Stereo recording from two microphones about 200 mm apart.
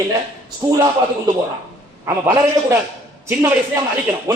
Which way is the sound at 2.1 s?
15° right (ahead or behind).